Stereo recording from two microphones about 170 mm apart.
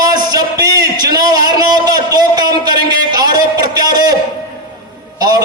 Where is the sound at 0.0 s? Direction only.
20° right (ahead or behind).